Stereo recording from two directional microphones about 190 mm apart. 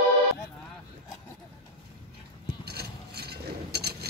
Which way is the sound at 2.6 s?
55° right (ahead or behind).